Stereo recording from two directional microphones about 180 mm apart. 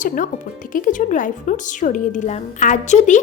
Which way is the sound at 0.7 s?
45° left (ahead or behind).